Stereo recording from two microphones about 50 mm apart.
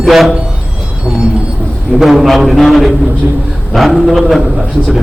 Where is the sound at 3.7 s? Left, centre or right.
Centre.